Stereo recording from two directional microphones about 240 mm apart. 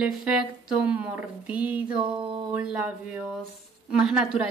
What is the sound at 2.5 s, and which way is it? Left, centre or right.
Speech, centre.